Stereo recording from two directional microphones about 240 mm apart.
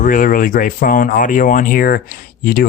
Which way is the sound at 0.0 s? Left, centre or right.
Left.